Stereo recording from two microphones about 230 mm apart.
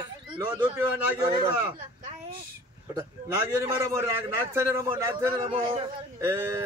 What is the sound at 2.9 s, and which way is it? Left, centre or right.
A man's voice, centre.